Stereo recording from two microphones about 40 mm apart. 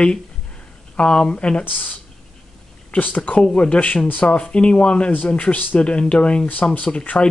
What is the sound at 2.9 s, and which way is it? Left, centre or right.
Speech, left.